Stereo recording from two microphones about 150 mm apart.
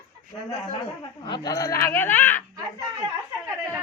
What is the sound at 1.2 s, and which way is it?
Speech, 30° left (ahead or behind).